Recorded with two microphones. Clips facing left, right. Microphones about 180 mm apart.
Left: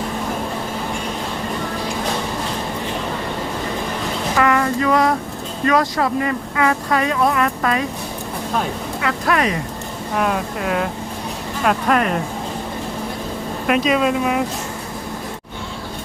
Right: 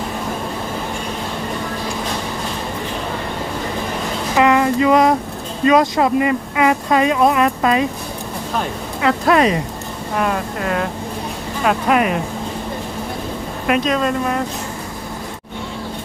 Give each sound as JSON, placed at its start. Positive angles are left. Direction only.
{"t": 4.4, "sound": "a sound", "side_deg": -20}
{"t": 5.6, "sound": "speech", "side_deg": -20}
{"t": 9.0, "sound": "speech", "side_deg": -25}
{"t": 10.2, "sound": "speech", "side_deg": 0}
{"t": 13.7, "sound": "speech", "side_deg": 0}